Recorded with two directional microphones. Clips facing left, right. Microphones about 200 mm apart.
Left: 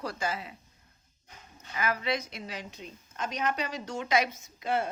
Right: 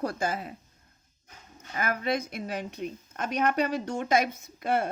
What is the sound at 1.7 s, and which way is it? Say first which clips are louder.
Speech: right 2 dB; 50° right (ahead or behind).